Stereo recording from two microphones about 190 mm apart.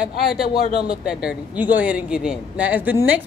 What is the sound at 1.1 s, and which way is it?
Speech, 5° right (ahead or behind).